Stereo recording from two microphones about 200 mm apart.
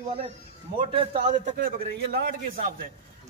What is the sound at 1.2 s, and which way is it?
Speech, 35° right (ahead or behind).